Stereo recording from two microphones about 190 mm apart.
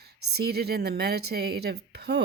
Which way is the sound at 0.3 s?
60° right (ahead or behind).